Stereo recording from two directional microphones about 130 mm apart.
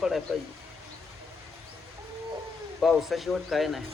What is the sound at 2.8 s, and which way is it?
A man's voice, centre (ahead or behind).